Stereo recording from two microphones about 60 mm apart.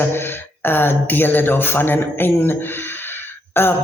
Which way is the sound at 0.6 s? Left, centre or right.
Left.